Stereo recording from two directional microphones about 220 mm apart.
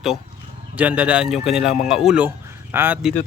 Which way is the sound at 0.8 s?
5° right (ahead or behind).